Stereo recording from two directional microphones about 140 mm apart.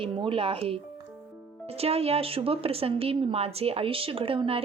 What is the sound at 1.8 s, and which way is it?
Speech, 45° right (ahead or behind).